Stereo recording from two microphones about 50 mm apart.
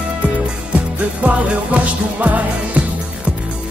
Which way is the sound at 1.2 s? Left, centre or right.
Right.